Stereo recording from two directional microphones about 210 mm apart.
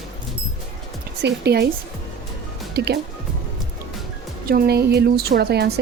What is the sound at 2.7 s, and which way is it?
Speech, 50° right (ahead or behind).